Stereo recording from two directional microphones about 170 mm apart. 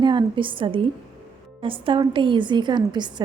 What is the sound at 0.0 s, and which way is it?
A woman's voice, 25° right (ahead or behind).